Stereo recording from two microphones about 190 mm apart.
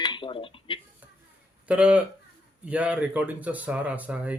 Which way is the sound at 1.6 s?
5° right (ahead or behind).